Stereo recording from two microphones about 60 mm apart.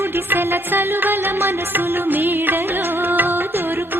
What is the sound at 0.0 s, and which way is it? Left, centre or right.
Music, right.